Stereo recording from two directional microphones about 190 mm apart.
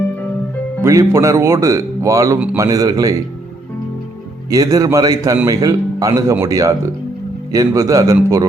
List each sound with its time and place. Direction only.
0.8 s a man's voice: 15° right (ahead or behind)
4.5 s speech: 20° right (ahead or behind)